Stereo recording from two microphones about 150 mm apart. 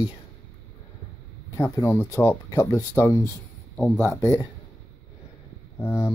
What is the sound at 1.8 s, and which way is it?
Speech, 20° left (ahead or behind).